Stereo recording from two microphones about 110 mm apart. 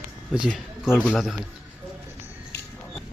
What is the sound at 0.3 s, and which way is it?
Speech, 10° right (ahead or behind).